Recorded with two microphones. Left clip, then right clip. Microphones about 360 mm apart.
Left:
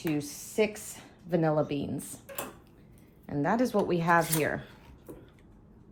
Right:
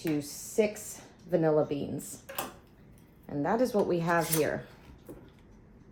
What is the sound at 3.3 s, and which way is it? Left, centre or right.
Speech, left.